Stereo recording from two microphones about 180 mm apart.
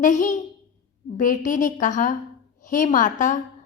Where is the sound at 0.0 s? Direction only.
45° left (ahead or behind).